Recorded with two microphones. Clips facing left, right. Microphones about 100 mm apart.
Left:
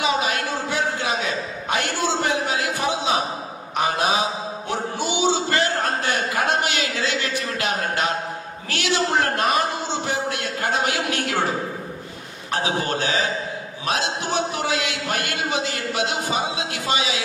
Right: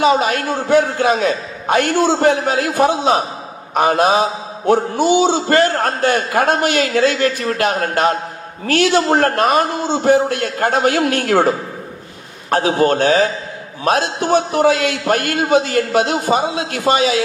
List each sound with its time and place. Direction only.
0.0 s a man's voice: 45° right (ahead or behind)